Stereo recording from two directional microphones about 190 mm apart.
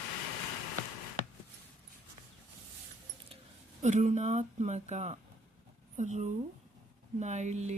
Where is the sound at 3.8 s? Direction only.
40° right (ahead or behind).